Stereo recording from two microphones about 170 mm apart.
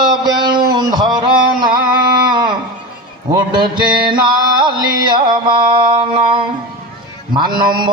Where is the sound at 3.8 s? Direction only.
25° right (ahead or behind).